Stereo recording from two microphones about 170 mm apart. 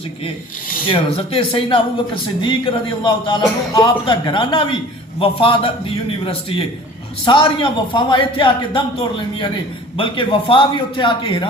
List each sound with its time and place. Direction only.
0.9 s speech: 35° left (ahead or behind)
7.3 s speech: 25° left (ahead or behind)